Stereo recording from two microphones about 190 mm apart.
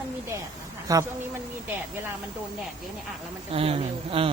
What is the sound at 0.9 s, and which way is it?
Speech, 15° right (ahead or behind).